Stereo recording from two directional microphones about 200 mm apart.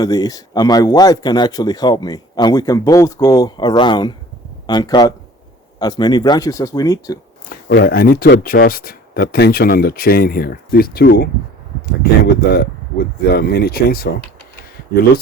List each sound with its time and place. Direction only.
0.0 s speech: 20° left (ahead or behind)
7.5 s speech: 50° left (ahead or behind)